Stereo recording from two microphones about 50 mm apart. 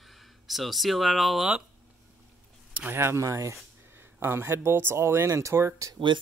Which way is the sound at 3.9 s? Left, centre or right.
Right.